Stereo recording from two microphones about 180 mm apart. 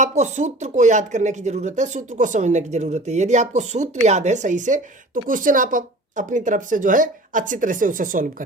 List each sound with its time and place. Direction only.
0.0 s speech: 40° right (ahead or behind)